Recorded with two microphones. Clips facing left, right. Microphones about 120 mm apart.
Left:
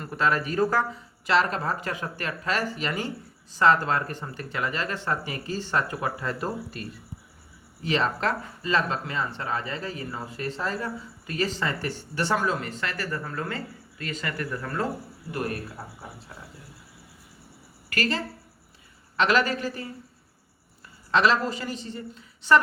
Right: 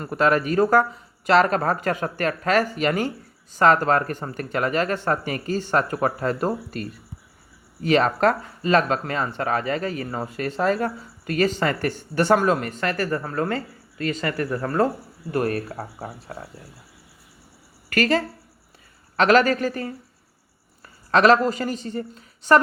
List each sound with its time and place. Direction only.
0.0 s speech: 55° right (ahead or behind)
17.8 s speech: 50° right (ahead or behind)
21.1 s speech: 50° right (ahead or behind)